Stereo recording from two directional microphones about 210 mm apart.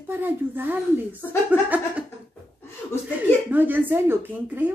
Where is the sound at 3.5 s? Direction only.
10° right (ahead or behind).